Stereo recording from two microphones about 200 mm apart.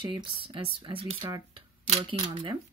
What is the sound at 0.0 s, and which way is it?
Speech, 25° right (ahead or behind).